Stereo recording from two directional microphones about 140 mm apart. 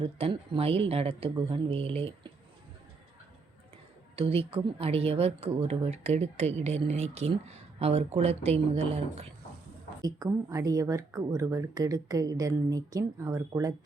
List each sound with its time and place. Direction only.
0.0 s speech: 40° right (ahead or behind)
4.1 s speech: 40° right (ahead or behind)
10.0 s speech: 25° right (ahead or behind)